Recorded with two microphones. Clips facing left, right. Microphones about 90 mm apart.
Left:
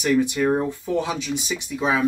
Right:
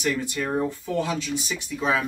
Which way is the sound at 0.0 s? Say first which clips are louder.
Left 7 dB; 15° left (ahead or behind).